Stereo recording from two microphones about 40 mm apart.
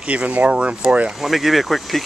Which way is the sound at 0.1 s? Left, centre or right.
Right.